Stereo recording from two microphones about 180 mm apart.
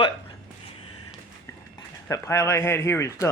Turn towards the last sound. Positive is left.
turn(degrees=15)  # may be behind; listen again after turning